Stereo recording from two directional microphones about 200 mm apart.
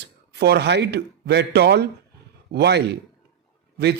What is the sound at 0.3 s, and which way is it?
Speech, 55° right (ahead or behind).